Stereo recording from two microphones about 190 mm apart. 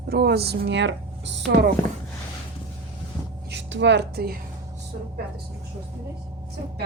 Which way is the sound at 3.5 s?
70° right (ahead or behind).